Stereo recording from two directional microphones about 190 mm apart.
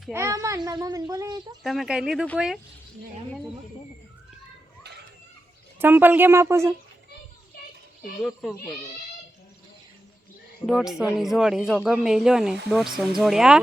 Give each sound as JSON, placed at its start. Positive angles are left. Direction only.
{"t": 0.1, "sound": "a child's voice", "side_deg": -15}
{"t": 1.6, "sound": "speech", "side_deg": 0}
{"t": 5.8, "sound": "a child's voice", "side_deg": -10}
{"t": 8.2, "sound": "speech", "side_deg": 0}
{"t": 10.7, "sound": "speech", "side_deg": 0}